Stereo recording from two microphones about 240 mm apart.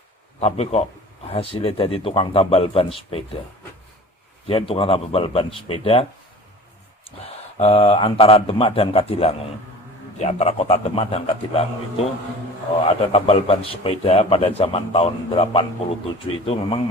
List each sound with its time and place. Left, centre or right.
0.3 s a man's voice: left
4.7 s a man's voice: left
7.6 s a man's voice: left
13.1 s a man's voice: left